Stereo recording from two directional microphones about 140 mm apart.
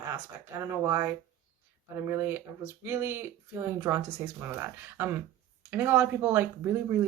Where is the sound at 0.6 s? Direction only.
20° right (ahead or behind).